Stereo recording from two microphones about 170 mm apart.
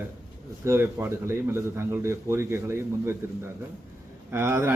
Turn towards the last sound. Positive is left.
turn(degrees=-15)  # may be behind; listen again after turning